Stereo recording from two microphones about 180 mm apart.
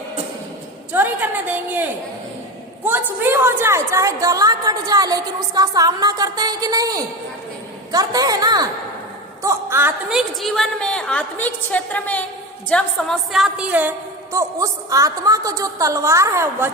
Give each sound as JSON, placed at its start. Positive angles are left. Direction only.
{"t": 0.9, "sound": "a woman's voice", "side_deg": -10}